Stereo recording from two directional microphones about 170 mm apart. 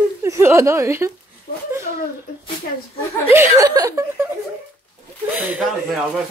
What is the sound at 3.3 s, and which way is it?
Speech, 15° right (ahead or behind).